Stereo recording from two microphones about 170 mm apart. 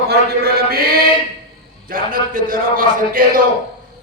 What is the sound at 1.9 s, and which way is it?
A man's voice, 55° right (ahead or behind).